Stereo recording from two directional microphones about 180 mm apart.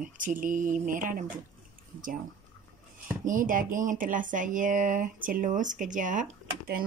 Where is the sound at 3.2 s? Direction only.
45° right (ahead or behind).